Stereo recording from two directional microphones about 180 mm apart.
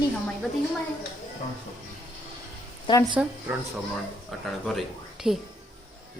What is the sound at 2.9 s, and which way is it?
Speech, 25° left (ahead or behind).